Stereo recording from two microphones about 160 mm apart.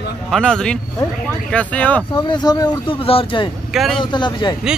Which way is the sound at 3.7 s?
Centre (ahead or behind).